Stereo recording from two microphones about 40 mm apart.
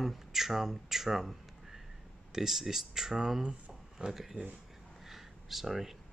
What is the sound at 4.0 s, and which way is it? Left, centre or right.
Speech, right.